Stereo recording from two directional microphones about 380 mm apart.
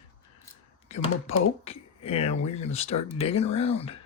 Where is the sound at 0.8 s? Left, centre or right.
Centre.